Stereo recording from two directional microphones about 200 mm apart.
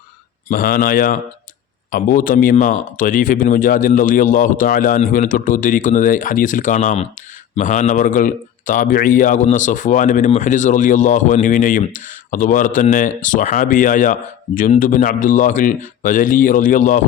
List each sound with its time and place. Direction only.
0.4 s speech: 45° left (ahead or behind)